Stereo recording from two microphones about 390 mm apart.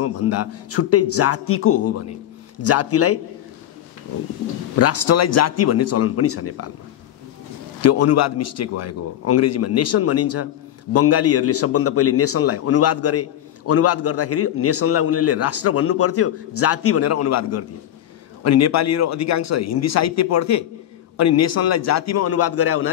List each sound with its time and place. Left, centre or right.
0.0 s a man's voice: left
4.7 s a man's voice: left
7.8 s a man's voice: left